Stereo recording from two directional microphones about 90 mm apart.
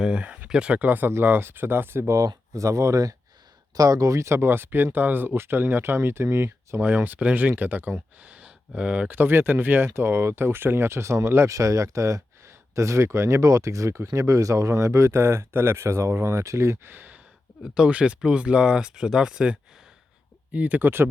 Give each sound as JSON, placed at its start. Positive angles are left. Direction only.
{"t": 0.0, "sound": "speech", "side_deg": -10}
{"t": 6.7, "sound": "speech", "side_deg": -20}